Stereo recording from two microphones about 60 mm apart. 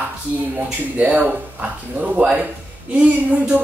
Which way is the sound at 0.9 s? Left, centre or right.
Right.